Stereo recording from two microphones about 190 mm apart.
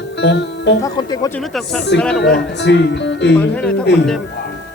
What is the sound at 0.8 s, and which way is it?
Speech, 20° left (ahead or behind).